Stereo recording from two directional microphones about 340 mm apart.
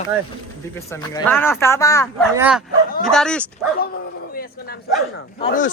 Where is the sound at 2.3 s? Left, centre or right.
Centre.